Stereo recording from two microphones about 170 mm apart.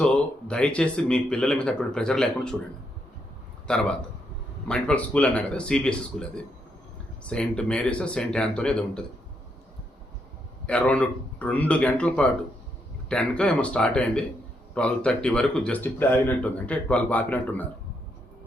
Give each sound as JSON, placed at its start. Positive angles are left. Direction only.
{"t": 0.0, "sound": "speech", "side_deg": 5}
{"t": 3.7, "sound": "speech", "side_deg": 5}
{"t": 10.7, "sound": "a man's voice", "side_deg": 10}